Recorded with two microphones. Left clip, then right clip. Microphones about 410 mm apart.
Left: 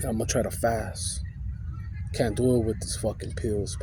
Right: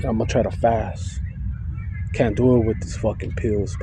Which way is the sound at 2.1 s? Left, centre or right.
Left.